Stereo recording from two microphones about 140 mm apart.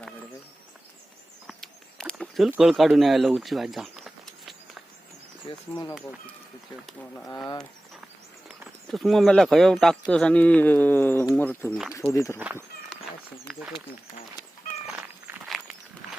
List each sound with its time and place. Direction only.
1.5 s a sound: 5° left (ahead or behind)
2.5 s speech: 5° right (ahead or behind)
5.5 s speech: 40° left (ahead or behind)
8.4 s speech: centre (ahead or behind); by 12.4 s 20° left (ahead or behind)
12.4 s speech: 10° right (ahead or behind)
13.5 s speech: centre (ahead or behind)
14.8 s cat: 15° right (ahead or behind)
15.4 s walk: centre (ahead or behind)